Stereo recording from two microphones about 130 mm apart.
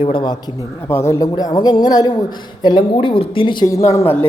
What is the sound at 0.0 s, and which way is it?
Speech, 40° left (ahead or behind).